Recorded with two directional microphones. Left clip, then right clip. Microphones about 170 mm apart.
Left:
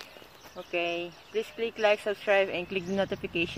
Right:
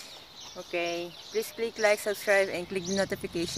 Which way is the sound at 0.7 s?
10° left (ahead or behind).